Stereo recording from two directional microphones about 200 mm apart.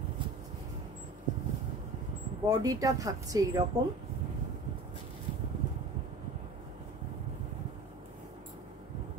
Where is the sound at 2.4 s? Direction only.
20° right (ahead or behind).